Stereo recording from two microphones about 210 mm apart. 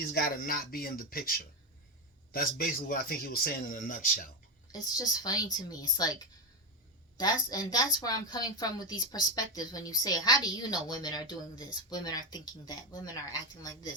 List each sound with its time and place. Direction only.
0.0 s speech: 45° left (ahead or behind)
4.7 s a woman's voice: 15° left (ahead or behind)
7.2 s a woman's voice: 20° left (ahead or behind)